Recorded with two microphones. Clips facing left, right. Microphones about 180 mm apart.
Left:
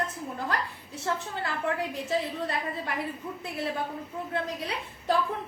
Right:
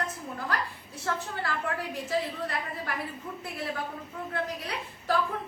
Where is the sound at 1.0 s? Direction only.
20° left (ahead or behind).